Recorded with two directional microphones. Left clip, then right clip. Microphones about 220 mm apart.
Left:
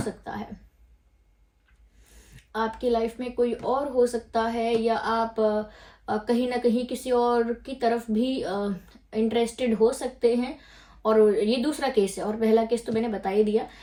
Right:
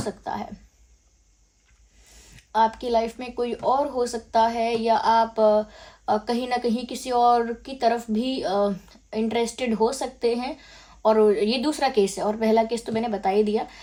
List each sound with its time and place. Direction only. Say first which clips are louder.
2.6 s a woman's voice: right 2 dB; 30° right (ahead or behind)